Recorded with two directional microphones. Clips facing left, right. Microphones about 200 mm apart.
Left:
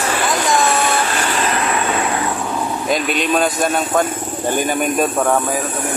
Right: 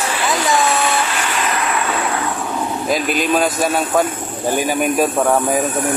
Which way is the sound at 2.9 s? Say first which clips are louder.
Right 1 dB; centre (ahead or behind).